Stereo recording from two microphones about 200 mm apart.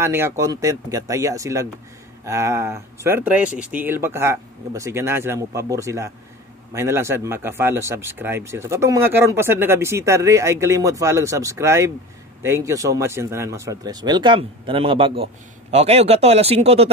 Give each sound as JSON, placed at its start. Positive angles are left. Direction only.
{"t": 0.0, "sound": "speech", "side_deg": -10}